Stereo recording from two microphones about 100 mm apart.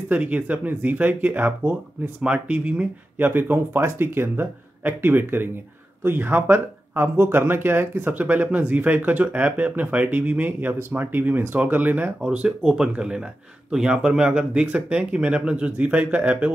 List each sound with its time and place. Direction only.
0.1 s speech: 15° right (ahead or behind)